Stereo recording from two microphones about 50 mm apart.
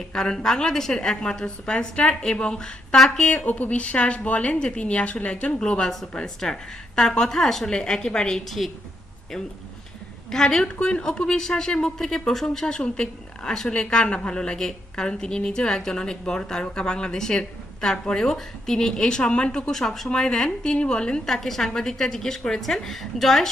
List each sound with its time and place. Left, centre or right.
0.1 s speech: centre
3.2 s speech: left
8.4 s a woman's voice: centre
10.3 s speech: centre
10.8 s speech: left
21.4 s speech: centre